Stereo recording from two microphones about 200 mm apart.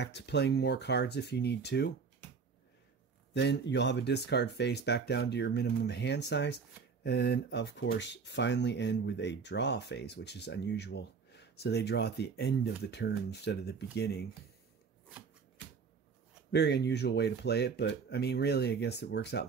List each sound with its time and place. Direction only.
0.0 s speech: 60° left (ahead or behind)
3.3 s speech: 60° left (ahead or behind)
16.5 s speech: 55° left (ahead or behind)